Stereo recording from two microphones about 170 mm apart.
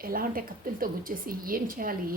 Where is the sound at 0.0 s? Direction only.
55° right (ahead or behind).